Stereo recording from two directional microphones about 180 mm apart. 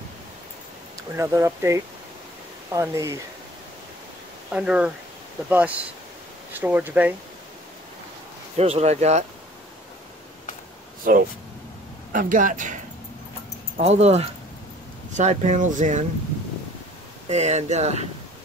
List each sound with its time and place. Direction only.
0.9 s speech: 15° right (ahead or behind)
4.5 s speech: 5° right (ahead or behind)
8.5 s speech: 35° right (ahead or behind)
11.1 s speech: 50° right (ahead or behind)
13.7 s speech: 35° right (ahead or behind)
17.3 s speech: 40° right (ahead or behind)